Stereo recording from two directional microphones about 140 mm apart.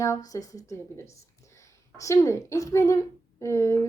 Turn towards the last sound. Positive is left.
turn(degrees=20)  # may be behind; listen again after turning